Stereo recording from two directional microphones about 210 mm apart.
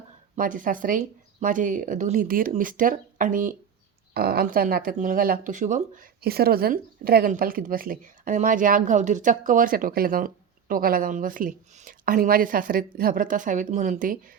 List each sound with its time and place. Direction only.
0.3 s speech: 40° right (ahead or behind)